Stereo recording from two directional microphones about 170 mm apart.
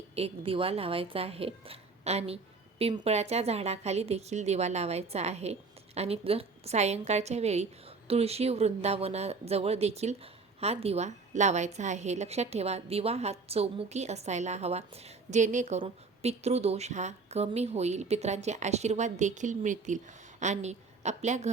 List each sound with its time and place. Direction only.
0.2 s a woman's voice: 35° right (ahead or behind)